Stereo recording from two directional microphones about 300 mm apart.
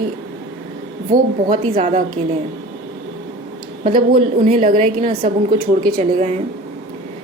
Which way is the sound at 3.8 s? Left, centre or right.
Right.